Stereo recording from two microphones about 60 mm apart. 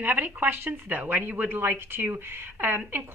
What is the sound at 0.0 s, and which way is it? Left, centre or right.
A woman's voice, right.